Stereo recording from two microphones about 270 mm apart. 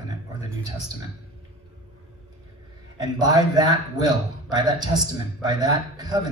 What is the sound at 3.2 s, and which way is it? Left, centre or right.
A man's voice, centre.